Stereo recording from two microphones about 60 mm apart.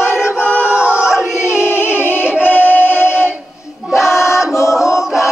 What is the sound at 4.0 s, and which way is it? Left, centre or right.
Music, left.